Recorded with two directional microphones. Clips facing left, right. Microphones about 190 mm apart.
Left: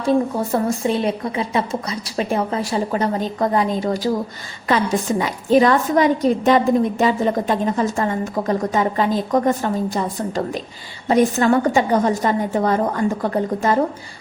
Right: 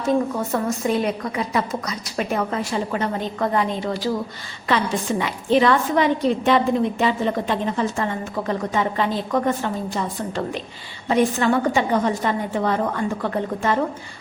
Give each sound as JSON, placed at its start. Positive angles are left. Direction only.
{"t": 0.0, "sound": "a woman's voice", "side_deg": 30}
{"t": 5.2, "sound": "a woman's voice", "side_deg": 40}